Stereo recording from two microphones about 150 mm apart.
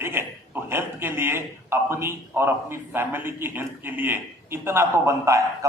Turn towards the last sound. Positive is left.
turn(degrees=-20)  # may be behind; listen again after turning